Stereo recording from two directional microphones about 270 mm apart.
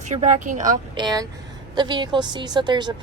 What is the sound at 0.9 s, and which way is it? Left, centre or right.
A woman's voice, centre.